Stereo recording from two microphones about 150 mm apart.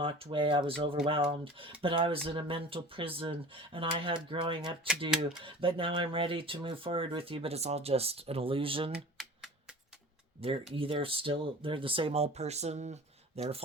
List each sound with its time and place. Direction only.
0.0 s speech: 35° right (ahead or behind)
10.8 s speech: 35° right (ahead or behind)